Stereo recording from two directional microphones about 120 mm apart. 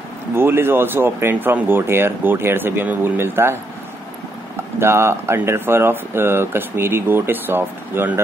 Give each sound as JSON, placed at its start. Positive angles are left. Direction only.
{"t": 0.4, "sound": "speech", "side_deg": -20}
{"t": 4.7, "sound": "speech", "side_deg": -20}